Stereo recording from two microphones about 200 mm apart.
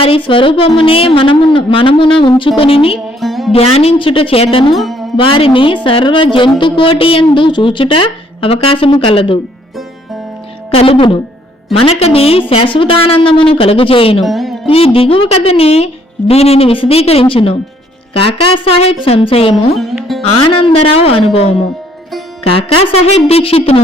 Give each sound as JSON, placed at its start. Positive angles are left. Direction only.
{"t": 0.0, "sound": "a woman's voice", "side_deg": 25}
{"t": 3.2, "sound": "music", "side_deg": 0}
{"t": 3.5, "sound": "a woman's voice", "side_deg": 30}
{"t": 4.7, "sound": "music", "side_deg": 0}
{"t": 5.1, "sound": "a woman's voice", "side_deg": 25}
{"t": 10.7, "sound": "a woman's voice", "side_deg": 25}
{"t": 14.2, "sound": "speech", "side_deg": 0}
{"t": 14.7, "sound": "a woman's voice", "side_deg": 30}
{"t": 19.7, "sound": "music", "side_deg": 0}
{"t": 20.2, "sound": "a woman's voice", "side_deg": 25}
{"t": 23.0, "sound": "a woman's voice", "side_deg": 30}